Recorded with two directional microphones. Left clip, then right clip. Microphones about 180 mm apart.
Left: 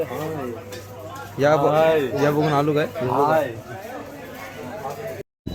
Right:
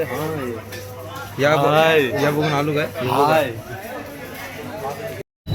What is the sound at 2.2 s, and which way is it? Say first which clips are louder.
Speech: even; 30° left (ahead or behind).